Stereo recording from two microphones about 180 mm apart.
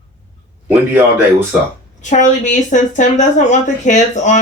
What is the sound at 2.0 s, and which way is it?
A woman's voice, 40° left (ahead or behind).